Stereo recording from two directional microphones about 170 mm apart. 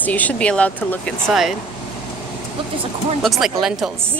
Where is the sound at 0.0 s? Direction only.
10° left (ahead or behind).